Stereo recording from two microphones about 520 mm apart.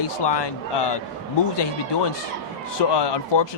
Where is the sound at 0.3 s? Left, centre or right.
Left.